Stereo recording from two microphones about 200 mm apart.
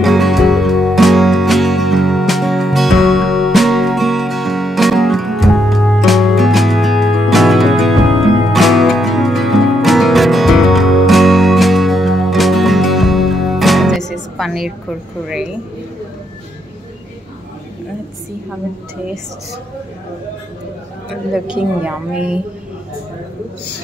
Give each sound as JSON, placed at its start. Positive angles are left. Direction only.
{"t": 0.0, "sound": "music", "side_deg": 0}
{"t": 14.4, "sound": "a sound", "side_deg": 0}
{"t": 21.5, "sound": "a woman's voice", "side_deg": -5}